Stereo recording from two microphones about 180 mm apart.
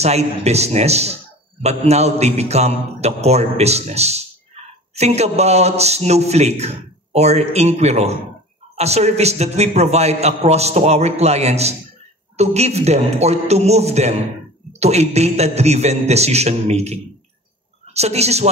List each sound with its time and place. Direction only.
0.0 s a man's voice: 35° right (ahead or behind)